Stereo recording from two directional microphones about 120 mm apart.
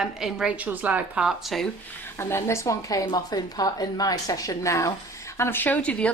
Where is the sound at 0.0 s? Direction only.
5° right (ahead or behind).